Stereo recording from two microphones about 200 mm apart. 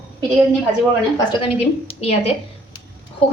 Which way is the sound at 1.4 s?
30° left (ahead or behind).